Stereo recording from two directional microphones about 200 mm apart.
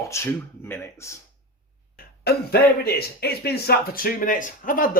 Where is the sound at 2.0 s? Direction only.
50° left (ahead or behind).